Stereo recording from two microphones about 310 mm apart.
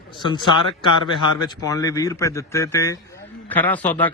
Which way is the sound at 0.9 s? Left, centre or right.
Right.